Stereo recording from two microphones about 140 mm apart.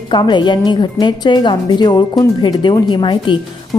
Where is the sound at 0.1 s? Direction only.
35° left (ahead or behind).